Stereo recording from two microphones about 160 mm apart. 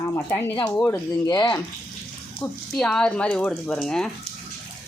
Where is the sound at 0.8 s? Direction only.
20° left (ahead or behind).